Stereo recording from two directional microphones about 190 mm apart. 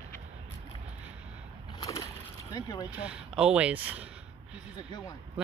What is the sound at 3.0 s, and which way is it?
Speech, 5° right (ahead or behind).